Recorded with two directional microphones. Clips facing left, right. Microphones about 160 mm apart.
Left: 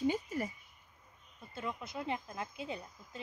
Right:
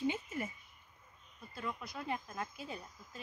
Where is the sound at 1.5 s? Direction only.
25° left (ahead or behind).